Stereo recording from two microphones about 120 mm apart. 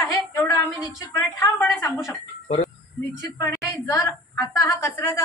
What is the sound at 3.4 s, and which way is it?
A woman's voice, 25° left (ahead or behind).